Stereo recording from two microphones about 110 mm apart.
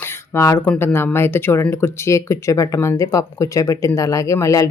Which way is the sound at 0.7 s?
20° left (ahead or behind).